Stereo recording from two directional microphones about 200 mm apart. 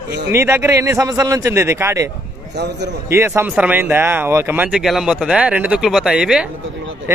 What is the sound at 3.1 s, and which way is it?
Speech, 10° right (ahead or behind).